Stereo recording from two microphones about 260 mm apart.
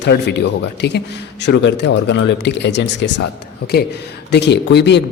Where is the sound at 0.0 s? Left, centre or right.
Left.